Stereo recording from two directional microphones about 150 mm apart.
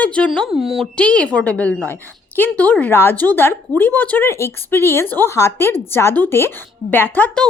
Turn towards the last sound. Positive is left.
turn(degrees=10)  # may be behind; listen again after turning